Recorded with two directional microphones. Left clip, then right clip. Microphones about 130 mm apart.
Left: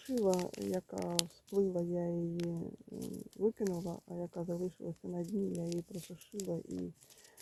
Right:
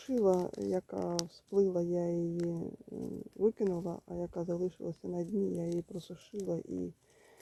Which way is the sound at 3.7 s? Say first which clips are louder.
Right 4 dB; 5° right (ahead or behind).